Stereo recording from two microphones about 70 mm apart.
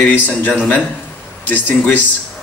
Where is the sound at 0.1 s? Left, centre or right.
Left.